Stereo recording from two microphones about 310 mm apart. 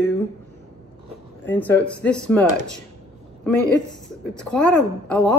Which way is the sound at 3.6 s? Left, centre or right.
Centre.